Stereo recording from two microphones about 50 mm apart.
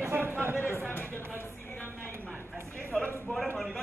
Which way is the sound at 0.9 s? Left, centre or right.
Left.